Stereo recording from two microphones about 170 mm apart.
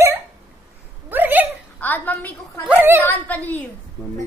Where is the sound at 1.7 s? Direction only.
10° left (ahead or behind).